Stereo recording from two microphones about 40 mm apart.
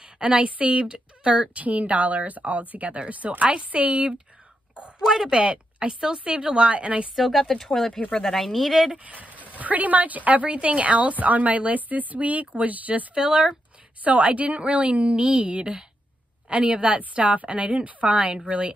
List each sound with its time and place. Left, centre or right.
0.0 s a woman's voice: right
1.6 s a woman's voice: right
5.0 s speech: centre
5.4 s a woman's voice: right
5.9 s a woman's voice: centre
7.2 s speech: centre
7.4 s speech: centre
8.9 s a woman's voice: right
13.1 s a woman's voice: right
14.0 s a woman's voice: right
17.8 s a woman's voice: right